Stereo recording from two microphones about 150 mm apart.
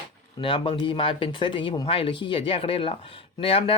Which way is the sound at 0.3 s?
35° left (ahead or behind).